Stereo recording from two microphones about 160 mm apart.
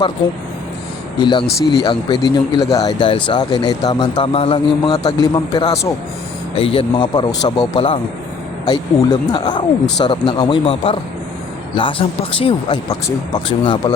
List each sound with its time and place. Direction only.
1.2 s speech: 30° left (ahead or behind)
4.3 s speech: 35° left (ahead or behind)
6.6 s speech: 35° left (ahead or behind)